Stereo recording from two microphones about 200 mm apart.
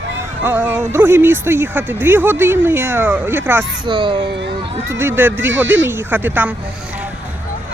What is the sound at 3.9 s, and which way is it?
Speech, 25° right (ahead or behind).